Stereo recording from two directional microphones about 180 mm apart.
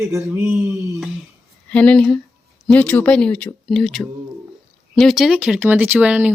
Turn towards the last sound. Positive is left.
turn(degrees=-10)  # may be behind; listen again after turning